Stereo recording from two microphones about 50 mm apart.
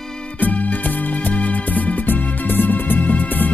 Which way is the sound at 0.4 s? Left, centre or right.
Left.